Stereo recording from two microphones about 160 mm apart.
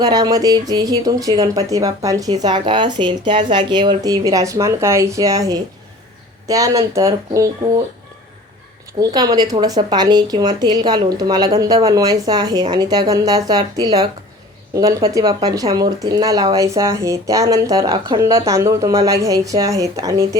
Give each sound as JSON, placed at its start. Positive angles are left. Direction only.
{"t": 0.0, "sound": "speech", "side_deg": -25}
{"t": 9.0, "sound": "speech", "side_deg": -25}